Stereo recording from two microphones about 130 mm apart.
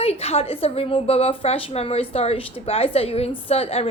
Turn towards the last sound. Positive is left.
turn(degrees=50)  # may be behind; listen again after turning